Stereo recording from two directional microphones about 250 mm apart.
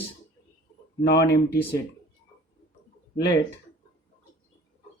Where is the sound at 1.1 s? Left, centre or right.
Left.